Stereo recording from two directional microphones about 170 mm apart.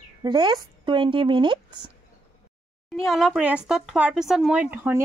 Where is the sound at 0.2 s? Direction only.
25° right (ahead or behind).